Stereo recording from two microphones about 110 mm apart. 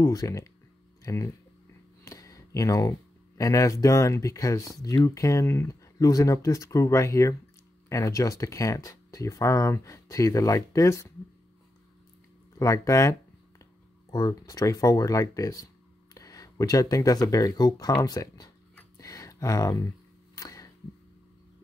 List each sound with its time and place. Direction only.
0.0 s speech: 30° left (ahead or behind)
12.5 s speech: 30° left (ahead or behind)
14.1 s speech: 35° left (ahead or behind)
18.9 s a sound: 30° left (ahead or behind)
20.3 s camera: 30° left (ahead or behind)